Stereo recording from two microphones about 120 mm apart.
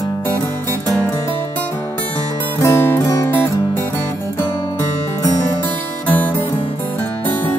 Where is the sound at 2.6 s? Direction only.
20° left (ahead or behind).